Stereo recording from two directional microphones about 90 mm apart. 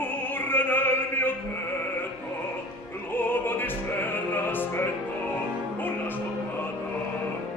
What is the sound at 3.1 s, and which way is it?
Opera, 25° left (ahead or behind).